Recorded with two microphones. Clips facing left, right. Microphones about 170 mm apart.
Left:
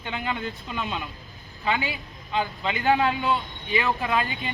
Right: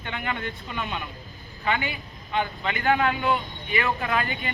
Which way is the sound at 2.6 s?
15° left (ahead or behind).